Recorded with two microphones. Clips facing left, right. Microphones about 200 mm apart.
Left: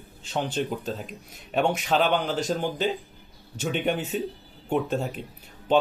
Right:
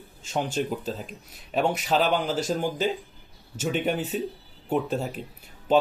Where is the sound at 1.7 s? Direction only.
40° right (ahead or behind).